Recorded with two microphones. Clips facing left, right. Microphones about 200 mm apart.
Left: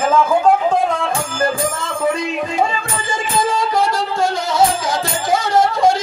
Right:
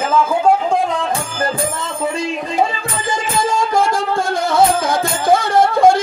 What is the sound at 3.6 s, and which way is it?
Music, 50° right (ahead or behind).